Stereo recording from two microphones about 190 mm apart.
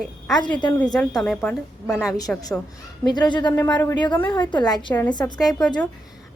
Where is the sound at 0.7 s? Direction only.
10° left (ahead or behind).